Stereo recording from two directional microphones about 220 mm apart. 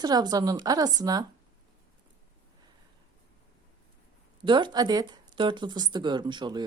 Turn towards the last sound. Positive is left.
turn(degrees=-20)  # may be behind; listen again after turning